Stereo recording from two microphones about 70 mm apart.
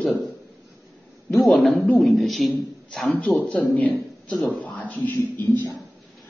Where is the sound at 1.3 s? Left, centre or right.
Centre.